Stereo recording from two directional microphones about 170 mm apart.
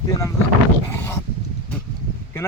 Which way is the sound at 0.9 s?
15° left (ahead or behind).